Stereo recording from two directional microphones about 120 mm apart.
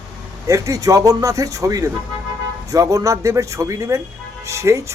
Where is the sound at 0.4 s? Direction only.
30° right (ahead or behind).